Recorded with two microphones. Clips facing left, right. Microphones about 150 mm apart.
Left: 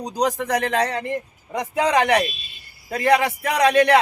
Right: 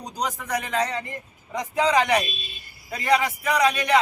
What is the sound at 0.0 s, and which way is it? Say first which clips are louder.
A man's voice: left 8 dB; 75° left (ahead or behind).